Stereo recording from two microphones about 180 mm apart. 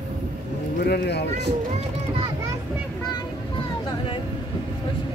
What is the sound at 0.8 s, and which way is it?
Speech, 65° left (ahead or behind).